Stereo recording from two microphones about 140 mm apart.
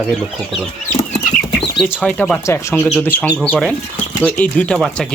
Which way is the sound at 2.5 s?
20° left (ahead or behind).